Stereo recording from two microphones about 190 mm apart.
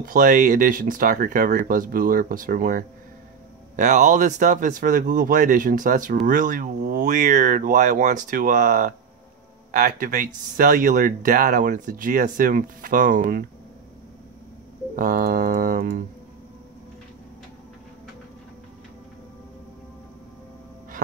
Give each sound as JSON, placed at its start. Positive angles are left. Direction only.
{"t": 0.0, "sound": "speech", "side_deg": -45}
{"t": 7.1, "sound": "speech", "side_deg": -40}
{"t": 15.0, "sound": "speech", "side_deg": -45}